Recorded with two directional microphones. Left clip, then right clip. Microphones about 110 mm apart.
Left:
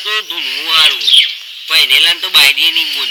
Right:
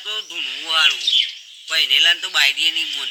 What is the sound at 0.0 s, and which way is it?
Speech, 10° right (ahead or behind).